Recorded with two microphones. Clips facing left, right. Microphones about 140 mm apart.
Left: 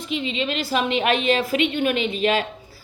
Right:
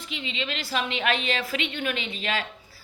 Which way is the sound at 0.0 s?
20° left (ahead or behind).